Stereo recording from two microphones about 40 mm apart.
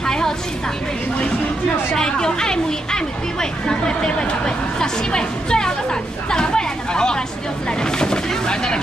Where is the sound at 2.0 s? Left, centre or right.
Centre.